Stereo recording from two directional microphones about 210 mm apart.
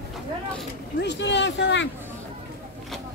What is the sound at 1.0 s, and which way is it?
Speech, 55° left (ahead or behind).